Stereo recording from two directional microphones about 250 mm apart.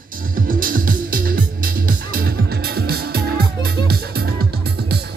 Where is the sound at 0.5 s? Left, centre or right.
Right.